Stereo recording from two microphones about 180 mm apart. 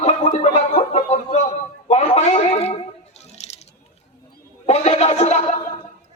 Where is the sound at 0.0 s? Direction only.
40° left (ahead or behind).